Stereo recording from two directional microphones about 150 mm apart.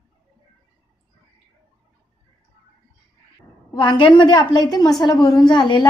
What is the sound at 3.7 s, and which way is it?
A woman's voice, 30° left (ahead or behind).